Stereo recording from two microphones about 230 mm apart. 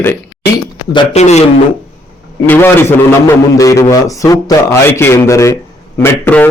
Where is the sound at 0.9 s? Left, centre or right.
Left.